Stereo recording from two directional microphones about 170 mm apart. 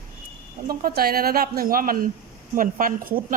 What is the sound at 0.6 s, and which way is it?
A woman's voice, 60° right (ahead or behind).